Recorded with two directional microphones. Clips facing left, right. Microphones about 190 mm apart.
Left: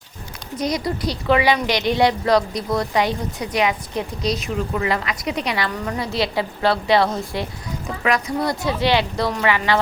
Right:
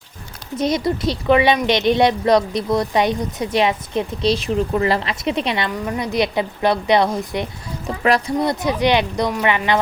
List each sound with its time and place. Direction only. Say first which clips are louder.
0.5 s a woman's voice: right 4 dB; 25° right (ahead or behind)